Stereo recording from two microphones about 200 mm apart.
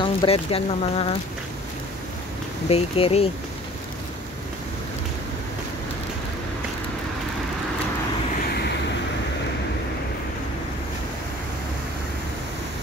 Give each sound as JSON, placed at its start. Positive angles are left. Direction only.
{"t": 0.0, "sound": "speech", "side_deg": 25}
{"t": 2.7, "sound": "speech", "side_deg": 30}